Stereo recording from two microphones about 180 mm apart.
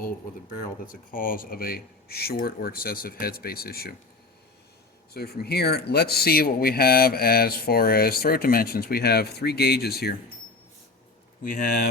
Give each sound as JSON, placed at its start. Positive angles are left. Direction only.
{"t": 0.9, "sound": "speech", "side_deg": 50}
{"t": 5.1, "sound": "speech", "side_deg": 60}
{"t": 11.4, "sound": "speech", "side_deg": 50}